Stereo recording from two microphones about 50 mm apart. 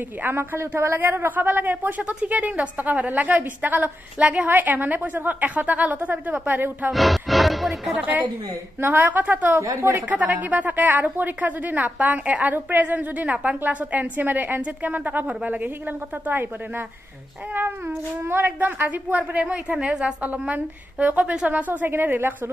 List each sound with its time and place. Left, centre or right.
0.2 s a woman's voice: right
0.9 s a woman's voice: right
4.5 s a woman's voice: right
6.9 s speech: centre
8.0 s a woman's voice: right
9.8 s a woman's voice: right
10.2 s a woman's voice: right
16.3 s a woman's voice: right
18.6 s a woman's voice: right
19.5 s a woman's voice: right